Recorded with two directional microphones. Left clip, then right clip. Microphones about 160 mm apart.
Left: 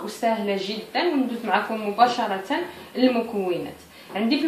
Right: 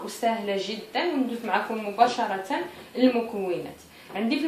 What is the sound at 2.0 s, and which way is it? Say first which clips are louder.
Speech: left 2 dB; 25° right (ahead or behind).